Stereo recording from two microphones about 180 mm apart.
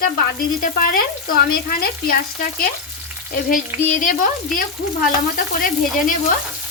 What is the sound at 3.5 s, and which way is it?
A woman's voice, 50° left (ahead or behind).